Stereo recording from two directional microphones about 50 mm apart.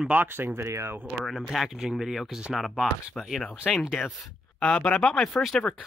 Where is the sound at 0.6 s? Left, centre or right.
Right.